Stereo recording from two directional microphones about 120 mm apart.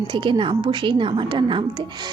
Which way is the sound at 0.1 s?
45° right (ahead or behind).